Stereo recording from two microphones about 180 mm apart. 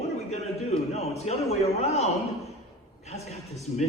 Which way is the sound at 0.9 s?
35° left (ahead or behind).